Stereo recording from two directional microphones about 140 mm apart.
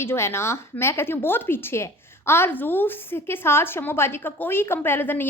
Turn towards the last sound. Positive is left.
turn(degrees=15)  # may be behind; listen again after turning